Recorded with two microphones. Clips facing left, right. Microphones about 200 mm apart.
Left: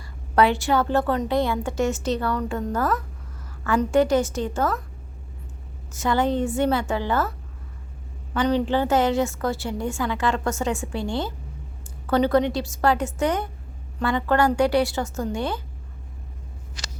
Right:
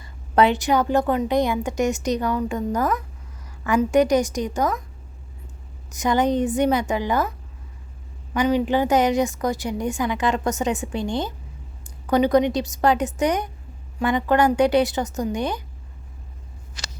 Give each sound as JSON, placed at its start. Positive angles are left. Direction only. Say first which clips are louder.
{"t": 0.0, "sound": "a woman's voice", "louder": "right 1 dB", "side_deg": -20}
{"t": 5.9, "sound": "a woman's voice", "louder": "right 2 dB", "side_deg": -15}